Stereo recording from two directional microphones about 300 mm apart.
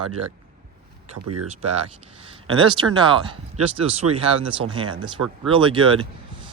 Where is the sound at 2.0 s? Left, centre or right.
Centre.